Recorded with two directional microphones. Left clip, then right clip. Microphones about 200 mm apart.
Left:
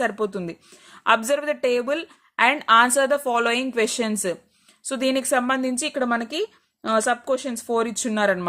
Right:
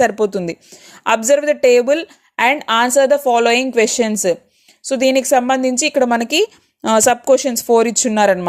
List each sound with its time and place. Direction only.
0.0 s a woman's voice: 25° right (ahead or behind)